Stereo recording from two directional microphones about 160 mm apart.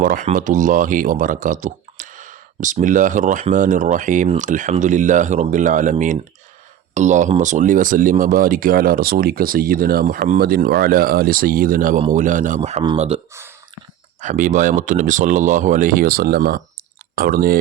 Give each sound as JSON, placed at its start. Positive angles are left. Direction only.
{"t": 0.0, "sound": "speech", "side_deg": -55}
{"t": 14.2, "sound": "speech", "side_deg": -50}